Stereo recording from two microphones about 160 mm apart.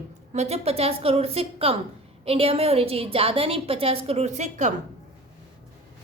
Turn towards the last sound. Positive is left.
turn(degrees=-45)  # may be behind; listen again after turning